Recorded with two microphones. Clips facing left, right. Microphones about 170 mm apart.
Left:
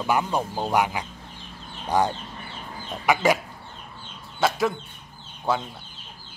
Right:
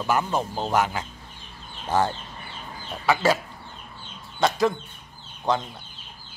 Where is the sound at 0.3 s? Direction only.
15° left (ahead or behind).